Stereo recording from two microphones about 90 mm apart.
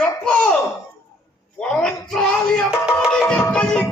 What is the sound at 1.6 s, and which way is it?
Speech, 10° left (ahead or behind).